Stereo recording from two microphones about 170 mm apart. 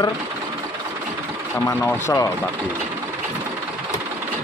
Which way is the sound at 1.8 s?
15° left (ahead or behind).